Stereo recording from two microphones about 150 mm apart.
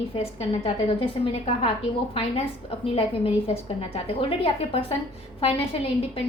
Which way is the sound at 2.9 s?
40° left (ahead or behind).